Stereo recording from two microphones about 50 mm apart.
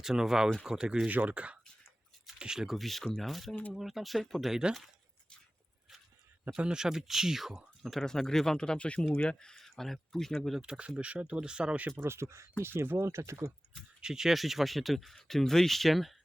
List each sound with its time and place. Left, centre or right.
0.0 s speech: centre
1.0 s speech: right
2.4 s speech: centre
2.7 s speech: centre
6.4 s speech: right
6.7 s speech: centre
8.0 s speech: centre
10.6 s speech: right
12.0 s speech: right
12.6 s speech: right
14.0 s speech: centre